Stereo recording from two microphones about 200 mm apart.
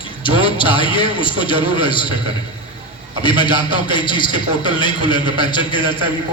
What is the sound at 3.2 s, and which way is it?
A man's voice, 25° left (ahead or behind).